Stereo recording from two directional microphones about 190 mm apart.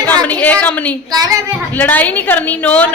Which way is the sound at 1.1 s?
20° right (ahead or behind).